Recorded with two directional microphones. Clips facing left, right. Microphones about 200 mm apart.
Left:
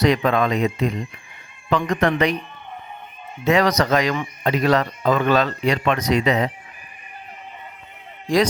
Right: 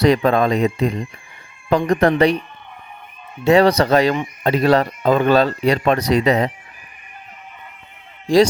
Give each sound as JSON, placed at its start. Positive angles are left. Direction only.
{"t": 0.0, "sound": "speech", "side_deg": -35}
{"t": 3.4, "sound": "speech", "side_deg": -30}